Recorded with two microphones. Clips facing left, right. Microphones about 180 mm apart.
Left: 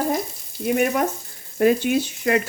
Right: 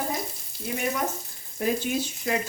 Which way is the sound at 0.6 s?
65° left (ahead or behind).